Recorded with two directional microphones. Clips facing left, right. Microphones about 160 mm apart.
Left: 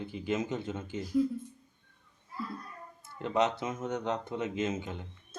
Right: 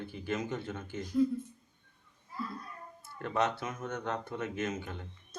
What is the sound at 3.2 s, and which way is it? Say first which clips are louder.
A man's voice: left 3 dB; 20° left (ahead or behind).